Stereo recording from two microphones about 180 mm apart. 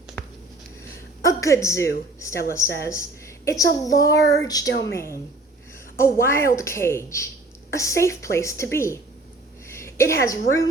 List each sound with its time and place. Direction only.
1.2 s a woman's voice: 20° left (ahead or behind)